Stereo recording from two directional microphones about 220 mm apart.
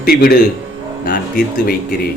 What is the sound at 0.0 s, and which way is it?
Speech, 45° left (ahead or behind).